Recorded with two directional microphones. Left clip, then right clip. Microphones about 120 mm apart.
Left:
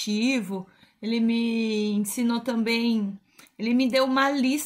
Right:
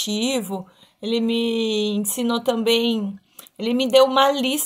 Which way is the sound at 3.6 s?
30° left (ahead or behind).